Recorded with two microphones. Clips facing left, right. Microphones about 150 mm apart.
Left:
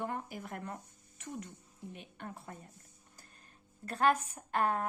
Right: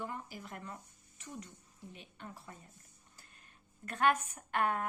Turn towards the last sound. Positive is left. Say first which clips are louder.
# left 2 dB
turn(degrees=35)  # may be behind; listen again after turning